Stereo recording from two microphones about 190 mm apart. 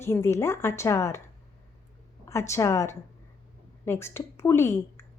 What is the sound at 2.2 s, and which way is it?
A woman's voice, 15° left (ahead or behind).